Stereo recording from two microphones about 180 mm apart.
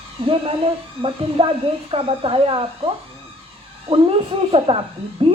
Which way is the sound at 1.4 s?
30° right (ahead or behind).